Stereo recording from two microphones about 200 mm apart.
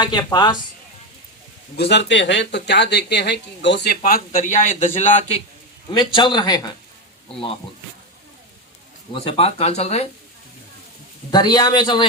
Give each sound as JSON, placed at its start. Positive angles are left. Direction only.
{"t": 0.0, "sound": "a man's voice", "side_deg": 20}
{"t": 1.7, "sound": "speech", "side_deg": 60}
{"t": 5.9, "sound": "a man's voice", "side_deg": 25}
{"t": 9.1, "sound": "speech", "side_deg": 30}
{"t": 11.3, "sound": "a man's voice", "side_deg": 20}